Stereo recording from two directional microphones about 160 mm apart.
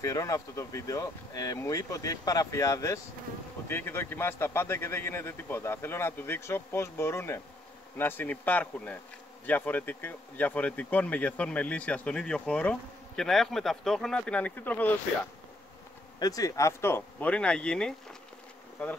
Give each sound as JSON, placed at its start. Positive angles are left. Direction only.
{"t": 0.0, "sound": "speech", "side_deg": 20}
{"t": 16.2, "sound": "speech", "side_deg": 20}